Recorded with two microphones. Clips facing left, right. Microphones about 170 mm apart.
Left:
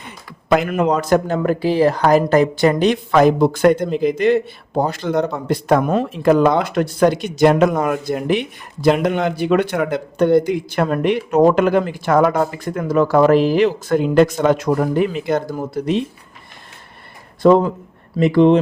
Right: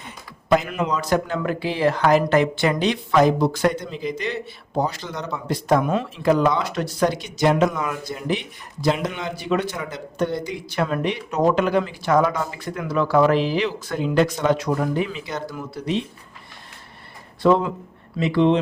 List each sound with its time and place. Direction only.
0.7 s speech: 55° left (ahead or behind)
17.4 s speech: 45° left (ahead or behind)